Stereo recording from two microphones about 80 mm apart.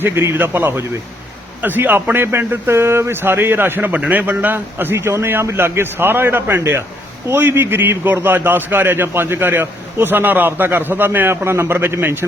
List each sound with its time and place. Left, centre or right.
0.0 s speech: right